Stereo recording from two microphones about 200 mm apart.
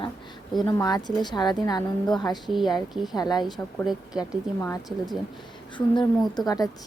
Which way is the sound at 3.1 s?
20° left (ahead or behind).